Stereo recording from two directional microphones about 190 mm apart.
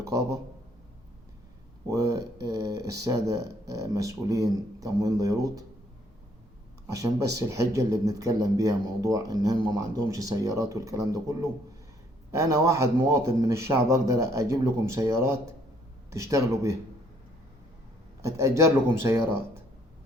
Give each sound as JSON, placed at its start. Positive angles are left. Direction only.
{"t": 0.0, "sound": "a man's voice", "side_deg": -15}
{"t": 1.9, "sound": "speech", "side_deg": -15}
{"t": 6.9, "sound": "speech", "side_deg": -20}
{"t": 18.2, "sound": "speech", "side_deg": -15}